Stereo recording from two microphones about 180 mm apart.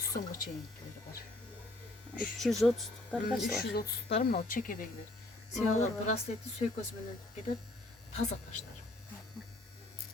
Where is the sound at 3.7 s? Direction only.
65° left (ahead or behind).